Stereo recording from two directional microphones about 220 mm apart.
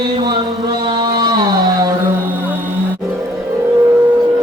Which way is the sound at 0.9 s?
20° right (ahead or behind).